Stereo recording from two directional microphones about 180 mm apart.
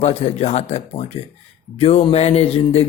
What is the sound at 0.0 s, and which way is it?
A man's voice, 35° left (ahead or behind).